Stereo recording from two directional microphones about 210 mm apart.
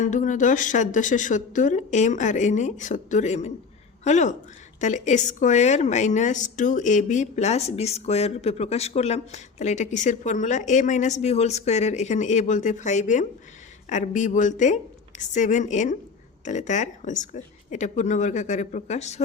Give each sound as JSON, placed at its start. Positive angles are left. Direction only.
{"t": 0.0, "sound": "a woman's voice", "side_deg": 35}